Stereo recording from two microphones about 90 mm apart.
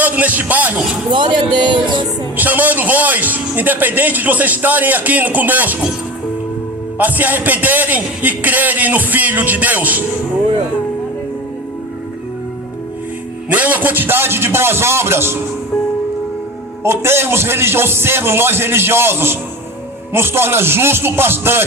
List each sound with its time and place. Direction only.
0.0 s speech: 20° right (ahead or behind)
1.1 s speech: 60° right (ahead or behind)
2.3 s a man's voice: 20° right (ahead or behind)
7.0 s a man's voice: 20° right (ahead or behind)
13.5 s a man's voice: 20° right (ahead or behind)
16.8 s a man's voice: 30° right (ahead or behind)